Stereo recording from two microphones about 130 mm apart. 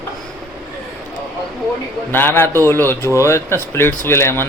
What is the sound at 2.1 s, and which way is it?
Speech, 15° left (ahead or behind).